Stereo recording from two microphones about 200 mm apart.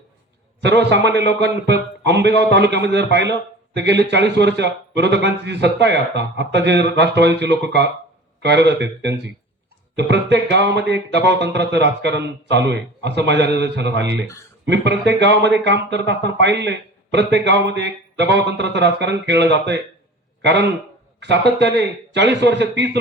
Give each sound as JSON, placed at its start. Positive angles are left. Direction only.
{"t": 0.6, "sound": "a man's voice", "side_deg": -60}